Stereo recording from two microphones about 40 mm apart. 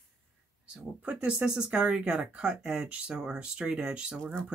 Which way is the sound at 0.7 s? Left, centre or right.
Right.